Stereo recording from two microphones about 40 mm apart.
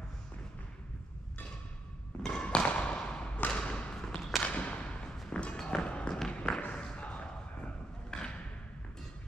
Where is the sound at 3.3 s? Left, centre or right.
Left.